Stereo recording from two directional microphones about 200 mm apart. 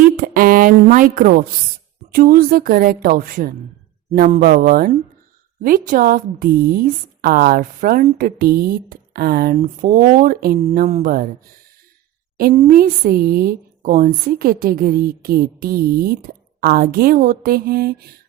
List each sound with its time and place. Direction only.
0.2 s a sound: 45° right (ahead or behind)
2.1 s a woman's voice: 45° right (ahead or behind)
12.5 s a woman's voice: 45° right (ahead or behind)